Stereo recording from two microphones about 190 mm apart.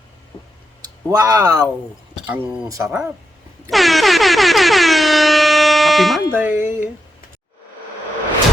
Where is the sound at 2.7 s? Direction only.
15° right (ahead or behind).